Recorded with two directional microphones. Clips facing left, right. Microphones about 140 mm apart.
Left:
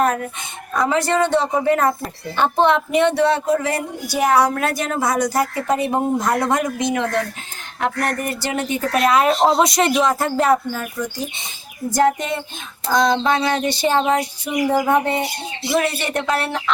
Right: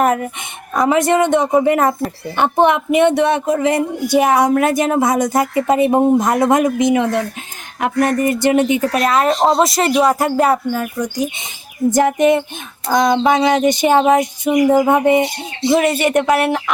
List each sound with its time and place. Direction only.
0.0 s speech: 15° right (ahead or behind)
8.9 s speech: centre (ahead or behind)